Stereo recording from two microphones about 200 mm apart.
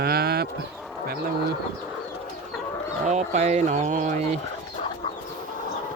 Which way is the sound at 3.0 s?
35° right (ahead or behind).